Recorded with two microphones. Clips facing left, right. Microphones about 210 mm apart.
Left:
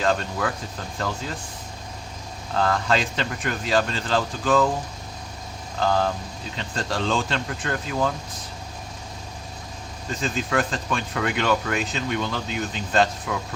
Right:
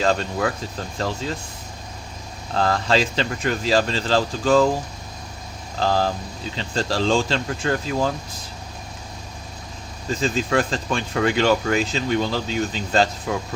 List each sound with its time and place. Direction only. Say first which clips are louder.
0.0 s speech: right 3 dB; 25° right (ahead or behind)
2.6 s speech: right 2 dB; 30° right (ahead or behind)
5.8 s speech: right 1 dB; 30° right (ahead or behind)
10.2 s speech: right 3 dB; 30° right (ahead or behind)